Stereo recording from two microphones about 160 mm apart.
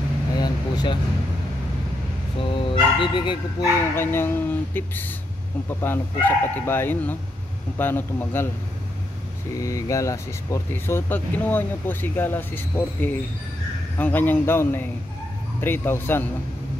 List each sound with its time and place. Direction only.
0.4 s vehicle: 25° left (ahead or behind)
2.5 s speech: 30° left (ahead or behind)
3.9 s speech: 15° left (ahead or behind)
9.6 s speech: 20° left (ahead or behind)